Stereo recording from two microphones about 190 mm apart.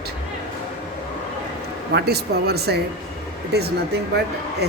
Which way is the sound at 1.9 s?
55° right (ahead or behind).